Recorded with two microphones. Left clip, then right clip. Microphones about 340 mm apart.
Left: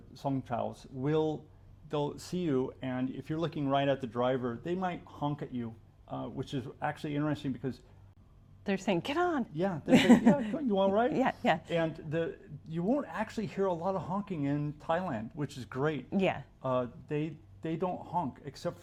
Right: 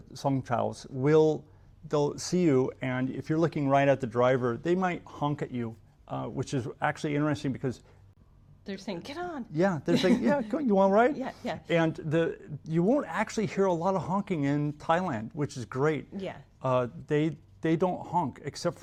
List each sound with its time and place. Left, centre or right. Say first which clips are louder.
0.1 s speech: right 5 dB; right
8.6 s a woman's voice: left 6 dB; centre
9.6 s speech: right 6 dB; right
9.9 s speech: left 5 dB; centre
10.5 s speech: right 5 dB; right
11.2 s speech: left 7 dB; centre
11.7 s speech: right 5 dB; right
16.1 s a woman's voice: left 7 dB; left
16.6 s speech: right 5 dB; right